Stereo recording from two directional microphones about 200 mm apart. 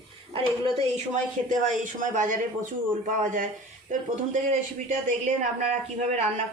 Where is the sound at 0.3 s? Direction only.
25° right (ahead or behind).